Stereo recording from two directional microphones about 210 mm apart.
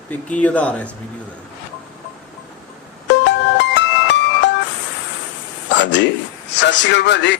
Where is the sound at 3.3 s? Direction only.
55° left (ahead or behind).